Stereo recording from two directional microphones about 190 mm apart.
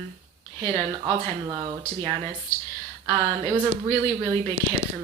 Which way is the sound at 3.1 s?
30° right (ahead or behind).